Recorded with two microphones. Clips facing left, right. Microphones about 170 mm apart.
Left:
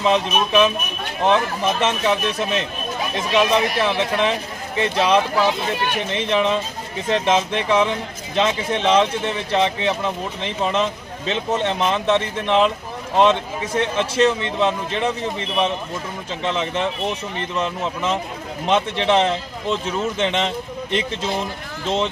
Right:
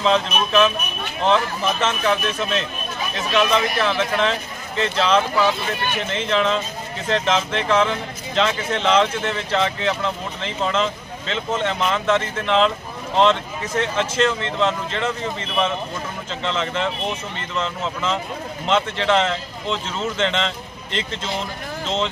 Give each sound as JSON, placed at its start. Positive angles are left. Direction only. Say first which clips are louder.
{"t": 0.0, "sound": "speech", "louder": "left 1 dB", "side_deg": 15}